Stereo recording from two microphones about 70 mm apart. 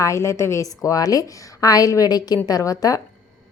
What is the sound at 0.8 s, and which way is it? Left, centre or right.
A woman's voice, left.